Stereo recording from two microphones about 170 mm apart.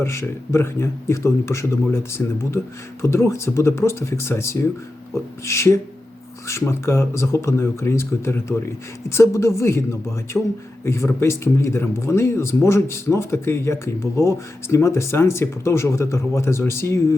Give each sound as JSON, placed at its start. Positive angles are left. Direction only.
{"t": 0.0, "sound": "speech", "side_deg": 15}
{"t": 10.3, "sound": "speech", "side_deg": 5}
{"t": 10.8, "sound": "speech", "side_deg": 15}